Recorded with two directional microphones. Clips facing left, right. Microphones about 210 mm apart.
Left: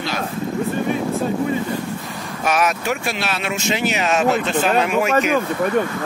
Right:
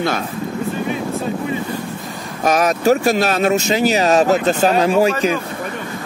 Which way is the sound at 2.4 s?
40° right (ahead or behind).